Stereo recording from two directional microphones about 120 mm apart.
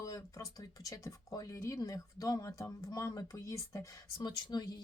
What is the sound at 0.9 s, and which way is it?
Speech, 30° left (ahead or behind).